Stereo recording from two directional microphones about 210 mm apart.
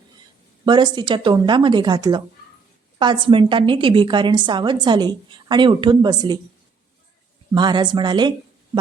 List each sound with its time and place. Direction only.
0.6 s a woman's voice: 20° right (ahead or behind)
7.5 s a woman's voice: 20° right (ahead or behind)